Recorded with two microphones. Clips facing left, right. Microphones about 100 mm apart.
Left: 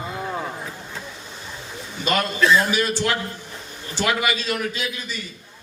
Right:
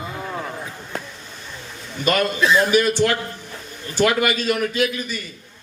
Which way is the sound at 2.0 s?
55° right (ahead or behind).